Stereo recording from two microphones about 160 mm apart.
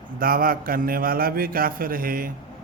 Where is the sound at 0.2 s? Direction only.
65° right (ahead or behind).